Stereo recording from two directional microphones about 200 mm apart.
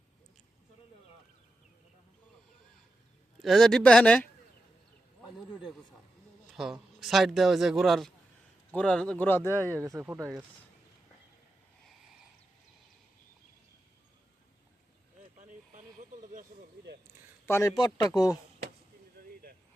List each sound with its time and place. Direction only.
3.3 s speech: centre (ahead or behind)
5.5 s a sound: centre (ahead or behind)
6.5 s speech: centre (ahead or behind)
9.5 s speech: 15° right (ahead or behind)
15.4 s vehicle: 35° right (ahead or behind)
17.4 s a man's voice: 15° left (ahead or behind)
19.2 s a sound: 50° right (ahead or behind)